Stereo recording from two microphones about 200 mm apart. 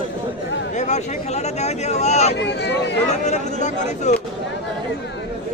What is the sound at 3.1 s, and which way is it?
Speech, 35° left (ahead or behind).